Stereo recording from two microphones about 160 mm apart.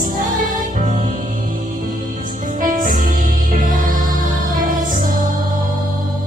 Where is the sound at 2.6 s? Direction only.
60° right (ahead or behind).